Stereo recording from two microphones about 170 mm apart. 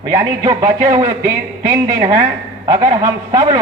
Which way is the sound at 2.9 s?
20° right (ahead or behind).